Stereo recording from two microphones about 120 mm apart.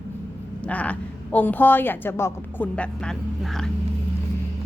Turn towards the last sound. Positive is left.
turn(degrees=5)  # may be behind; listen again after turning